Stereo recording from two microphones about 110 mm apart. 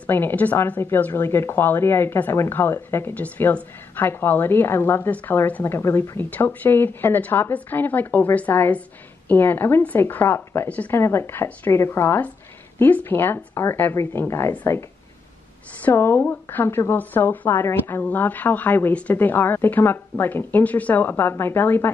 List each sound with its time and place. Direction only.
0.0 s a woman's voice: 20° left (ahead or behind)